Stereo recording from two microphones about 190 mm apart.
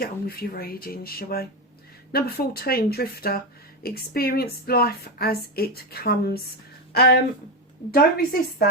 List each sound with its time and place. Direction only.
0.0 s a woman's voice: 50° left (ahead or behind)